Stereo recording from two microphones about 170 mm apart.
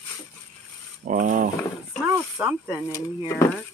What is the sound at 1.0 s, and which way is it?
Speech, 50° right (ahead or behind).